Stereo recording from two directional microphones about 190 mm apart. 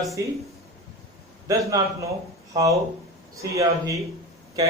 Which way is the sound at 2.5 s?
15° right (ahead or behind).